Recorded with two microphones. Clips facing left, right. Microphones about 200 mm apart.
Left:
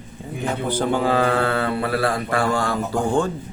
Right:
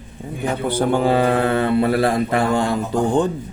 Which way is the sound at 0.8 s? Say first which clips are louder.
Right 3 dB; 15° right (ahead or behind).